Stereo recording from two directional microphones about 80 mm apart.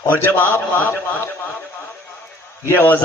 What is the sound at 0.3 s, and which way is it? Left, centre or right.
Speech, left.